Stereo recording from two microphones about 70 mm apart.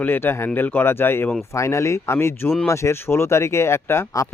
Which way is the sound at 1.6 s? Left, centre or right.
Left.